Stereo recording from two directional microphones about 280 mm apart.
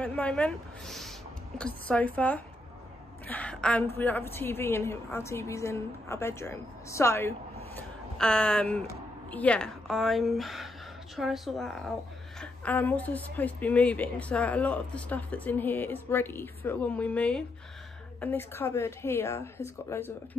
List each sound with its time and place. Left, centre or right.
0.0 s a woman's voice: centre